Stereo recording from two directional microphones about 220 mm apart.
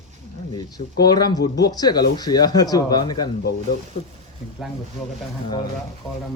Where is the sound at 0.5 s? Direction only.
20° left (ahead or behind).